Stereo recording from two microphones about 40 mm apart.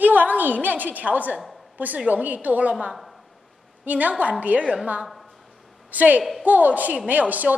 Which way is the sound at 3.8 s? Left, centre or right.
Right.